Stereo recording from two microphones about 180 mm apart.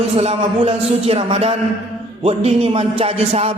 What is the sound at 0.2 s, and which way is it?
A man's voice, 35° right (ahead or behind).